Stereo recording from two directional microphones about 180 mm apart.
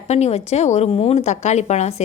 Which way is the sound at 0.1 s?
35° left (ahead or behind).